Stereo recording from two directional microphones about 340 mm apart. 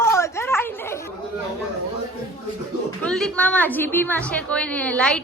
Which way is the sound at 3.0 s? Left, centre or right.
Centre.